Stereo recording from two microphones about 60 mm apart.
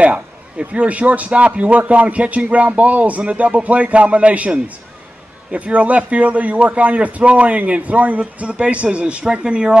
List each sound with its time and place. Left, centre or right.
0.0 s a man's voice: right